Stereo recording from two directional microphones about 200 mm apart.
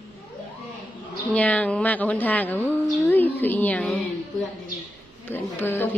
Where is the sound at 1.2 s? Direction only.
5° left (ahead or behind).